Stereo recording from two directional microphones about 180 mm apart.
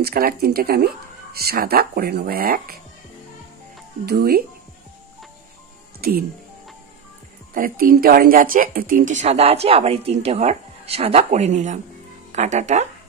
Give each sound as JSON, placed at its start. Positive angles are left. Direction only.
{"t": 0.0, "sound": "speech", "side_deg": -55}
{"t": 4.0, "sound": "speech", "side_deg": -60}
{"t": 5.9, "sound": "music", "side_deg": -55}
{"t": 7.5, "sound": "speech", "side_deg": -50}